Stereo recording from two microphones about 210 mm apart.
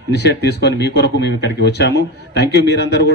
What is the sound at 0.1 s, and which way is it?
A man's voice, 50° left (ahead or behind).